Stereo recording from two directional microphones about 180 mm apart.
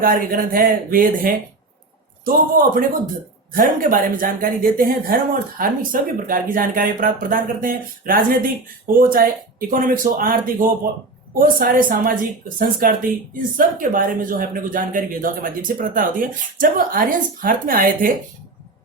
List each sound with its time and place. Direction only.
0.0 s speech: 50° right (ahead or behind)